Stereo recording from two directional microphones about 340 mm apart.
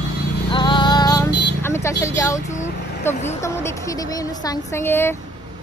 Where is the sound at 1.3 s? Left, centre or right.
Left.